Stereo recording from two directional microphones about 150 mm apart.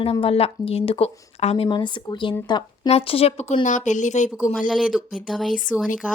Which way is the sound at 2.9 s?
40° left (ahead or behind).